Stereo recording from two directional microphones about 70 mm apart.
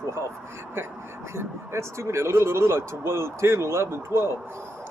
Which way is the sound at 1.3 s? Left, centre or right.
Right.